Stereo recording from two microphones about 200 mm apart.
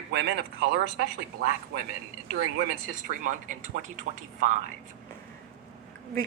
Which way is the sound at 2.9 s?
40° right (ahead or behind).